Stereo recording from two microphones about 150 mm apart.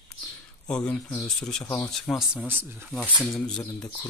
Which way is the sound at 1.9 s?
5° left (ahead or behind).